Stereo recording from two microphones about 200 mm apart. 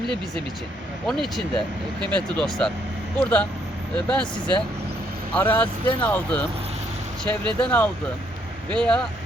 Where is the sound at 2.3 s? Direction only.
5° left (ahead or behind).